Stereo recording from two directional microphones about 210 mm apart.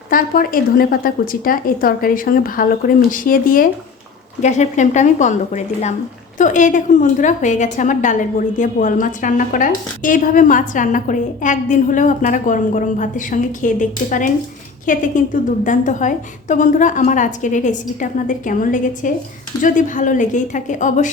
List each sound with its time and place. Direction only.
0.1 s a woman's voice: 45° left (ahead or behind)